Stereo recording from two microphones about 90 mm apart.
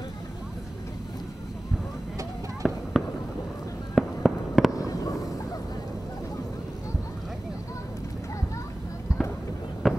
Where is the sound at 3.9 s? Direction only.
Centre (ahead or behind).